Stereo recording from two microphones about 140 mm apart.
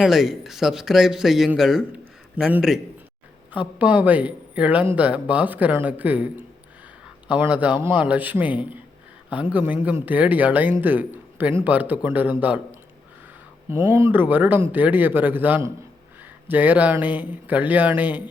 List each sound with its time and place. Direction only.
0.0 s a man's voice: centre (ahead or behind)
13.7 s speech: 20° right (ahead or behind)